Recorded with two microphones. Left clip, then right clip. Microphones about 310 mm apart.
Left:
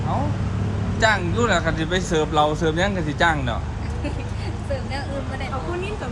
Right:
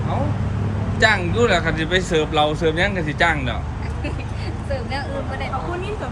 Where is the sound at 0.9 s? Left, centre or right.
Centre.